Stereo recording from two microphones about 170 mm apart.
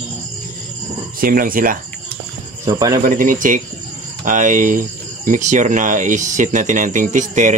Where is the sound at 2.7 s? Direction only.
20° right (ahead or behind).